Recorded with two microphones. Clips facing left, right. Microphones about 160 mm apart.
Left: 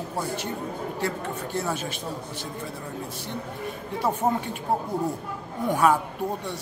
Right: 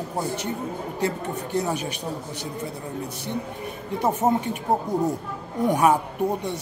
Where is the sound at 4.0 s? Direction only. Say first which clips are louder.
Right 3 dB; 20° right (ahead or behind).